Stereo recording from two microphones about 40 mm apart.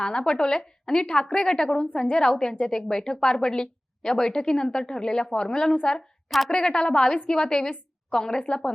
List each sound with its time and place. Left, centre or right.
0.0 s a woman's voice: left